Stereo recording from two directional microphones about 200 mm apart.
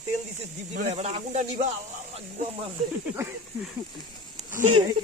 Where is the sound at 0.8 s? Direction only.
30° right (ahead or behind).